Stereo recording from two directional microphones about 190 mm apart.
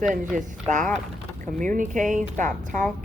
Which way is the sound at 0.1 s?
40° right (ahead or behind).